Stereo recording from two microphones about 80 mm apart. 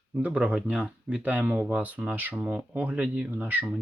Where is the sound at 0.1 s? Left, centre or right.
Centre.